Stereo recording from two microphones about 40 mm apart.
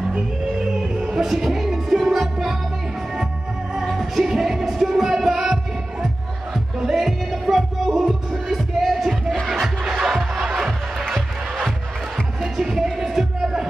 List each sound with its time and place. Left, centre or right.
0.1 s music: right
1.1 s music: centre
3.9 s music: centre
6.8 s music: centre
9.8 s music: centre
11.0 s music: centre
12.9 s music: centre